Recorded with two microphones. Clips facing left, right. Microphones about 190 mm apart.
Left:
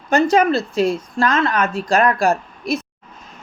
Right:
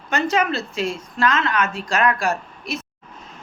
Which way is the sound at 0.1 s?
35° left (ahead or behind).